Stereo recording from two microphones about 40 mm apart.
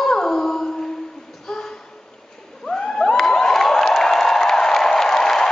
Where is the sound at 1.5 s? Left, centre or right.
Centre.